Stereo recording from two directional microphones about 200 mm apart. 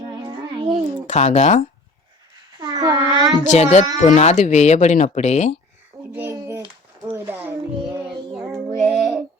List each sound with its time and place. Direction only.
0.3 s a sound: 20° right (ahead or behind)
1.0 s speech: 35° left (ahead or behind)
2.7 s child singing: 20° right (ahead or behind)
3.5 s speech: 35° left (ahead or behind)
6.1 s a sound: 15° right (ahead or behind)
8.5 s child singing: centre (ahead or behind)